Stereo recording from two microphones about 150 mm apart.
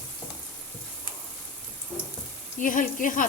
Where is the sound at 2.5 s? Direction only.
60° left (ahead or behind).